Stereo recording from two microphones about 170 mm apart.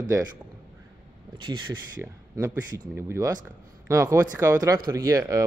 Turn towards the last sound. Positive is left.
turn(degrees=-20)  # may be behind; listen again after turning